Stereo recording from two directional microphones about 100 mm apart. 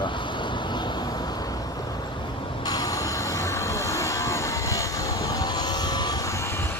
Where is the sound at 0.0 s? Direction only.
55° left (ahead or behind).